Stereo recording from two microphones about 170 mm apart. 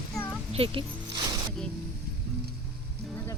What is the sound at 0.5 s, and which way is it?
Speech, 35° right (ahead or behind).